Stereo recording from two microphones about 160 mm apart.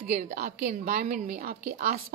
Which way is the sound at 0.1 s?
50° right (ahead or behind).